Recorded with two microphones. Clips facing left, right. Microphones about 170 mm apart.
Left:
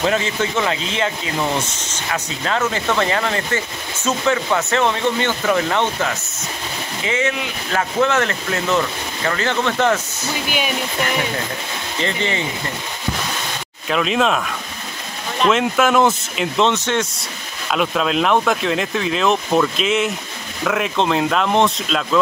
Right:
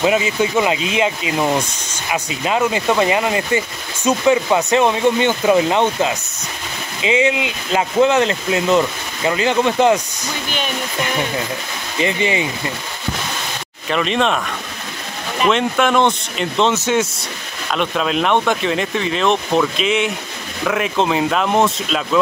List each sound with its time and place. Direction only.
0.0 s speech: 10° right (ahead or behind)
10.2 s speech: 5° left (ahead or behind)
12.0 s speech: 15° right (ahead or behind)
13.8 s speech: centre (ahead or behind)
15.4 s speech: centre (ahead or behind)